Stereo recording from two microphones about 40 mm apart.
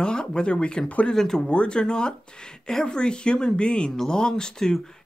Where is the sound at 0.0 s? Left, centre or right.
Left.